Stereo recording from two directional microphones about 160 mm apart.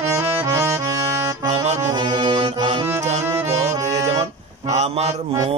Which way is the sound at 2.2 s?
30° right (ahead or behind).